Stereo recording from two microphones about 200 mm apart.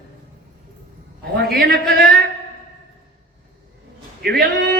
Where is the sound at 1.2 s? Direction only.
50° right (ahead or behind).